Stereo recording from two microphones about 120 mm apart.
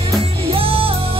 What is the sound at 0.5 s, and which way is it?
Music, 50° right (ahead or behind).